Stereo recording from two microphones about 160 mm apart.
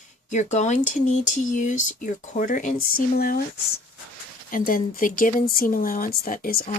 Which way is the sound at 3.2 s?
70° left (ahead or behind).